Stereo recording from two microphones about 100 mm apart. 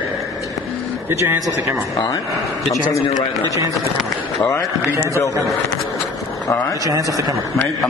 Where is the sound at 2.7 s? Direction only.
35° left (ahead or behind).